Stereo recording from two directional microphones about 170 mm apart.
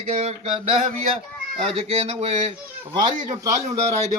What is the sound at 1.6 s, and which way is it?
Speech, 40° right (ahead or behind).